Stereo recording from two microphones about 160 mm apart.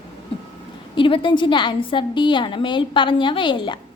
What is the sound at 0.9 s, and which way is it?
A woman's voice, 30° left (ahead or behind).